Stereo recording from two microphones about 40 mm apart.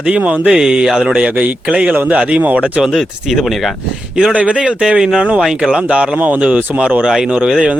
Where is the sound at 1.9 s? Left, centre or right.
Right.